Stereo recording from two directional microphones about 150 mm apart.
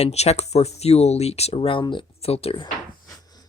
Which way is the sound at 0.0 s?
45° left (ahead or behind).